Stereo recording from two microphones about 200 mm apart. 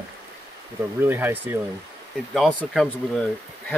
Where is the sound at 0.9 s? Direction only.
10° right (ahead or behind).